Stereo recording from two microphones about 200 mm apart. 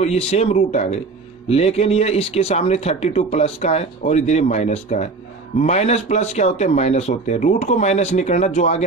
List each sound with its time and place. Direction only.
0.0 s speech: 30° left (ahead or behind)